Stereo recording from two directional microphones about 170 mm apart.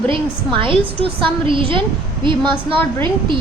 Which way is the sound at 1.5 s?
30° right (ahead or behind).